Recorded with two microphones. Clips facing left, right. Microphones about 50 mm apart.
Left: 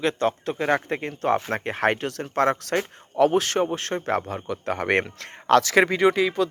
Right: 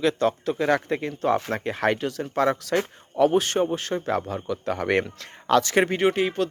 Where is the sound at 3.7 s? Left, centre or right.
Left.